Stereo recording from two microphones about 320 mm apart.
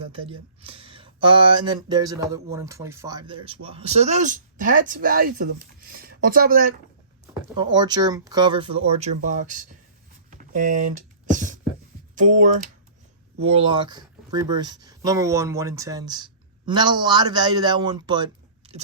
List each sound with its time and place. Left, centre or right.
0.1 s speech: centre
7.5 s speech: centre
10.2 s a sound: right
12.3 s speech: right